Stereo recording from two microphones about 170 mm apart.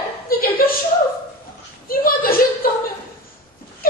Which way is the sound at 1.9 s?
60° left (ahead or behind).